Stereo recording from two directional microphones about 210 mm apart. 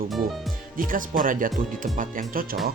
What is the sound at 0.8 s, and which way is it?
Speech, 40° right (ahead or behind).